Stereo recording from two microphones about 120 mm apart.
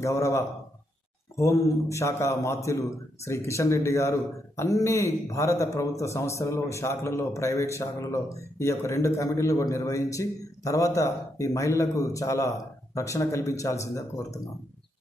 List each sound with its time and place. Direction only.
0.0 s a man's voice: 25° left (ahead or behind)